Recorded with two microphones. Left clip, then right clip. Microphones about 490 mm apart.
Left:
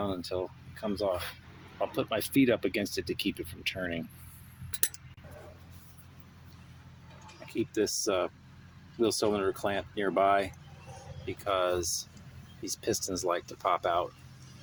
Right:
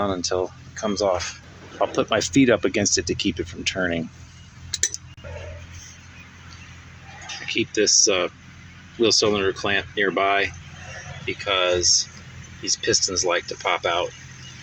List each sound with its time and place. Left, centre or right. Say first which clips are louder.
0.0 s speech: right 10 dB; left
7.8 s speech: right 11 dB; left